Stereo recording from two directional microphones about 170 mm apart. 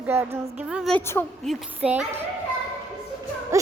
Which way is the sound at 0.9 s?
15° left (ahead or behind).